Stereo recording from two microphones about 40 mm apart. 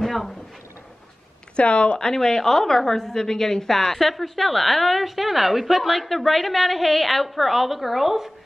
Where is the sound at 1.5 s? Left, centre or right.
Left.